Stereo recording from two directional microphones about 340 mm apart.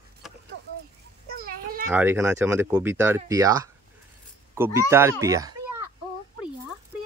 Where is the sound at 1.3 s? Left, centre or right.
Right.